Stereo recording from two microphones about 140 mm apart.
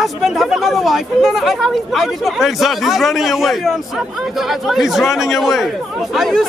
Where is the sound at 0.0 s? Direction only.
Centre (ahead or behind).